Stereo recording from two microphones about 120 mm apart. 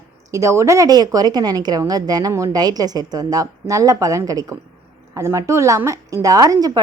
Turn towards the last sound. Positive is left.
turn(degrees=-30)  # may be behind; listen again after turning